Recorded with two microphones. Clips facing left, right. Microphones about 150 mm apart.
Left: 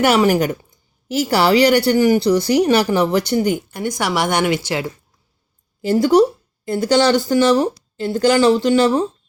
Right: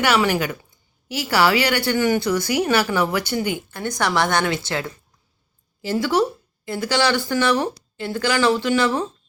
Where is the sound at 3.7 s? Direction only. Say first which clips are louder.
Left 2 dB; 15° left (ahead or behind).